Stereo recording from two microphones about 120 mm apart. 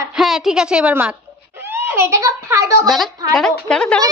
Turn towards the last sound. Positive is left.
turn(degrees=5)  # may be behind; listen again after turning